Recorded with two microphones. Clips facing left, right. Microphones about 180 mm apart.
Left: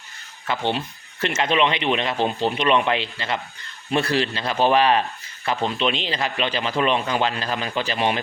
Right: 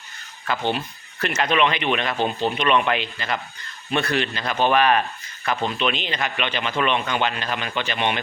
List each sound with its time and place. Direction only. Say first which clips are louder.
0.5 s speech: even; 25° left (ahead or behind)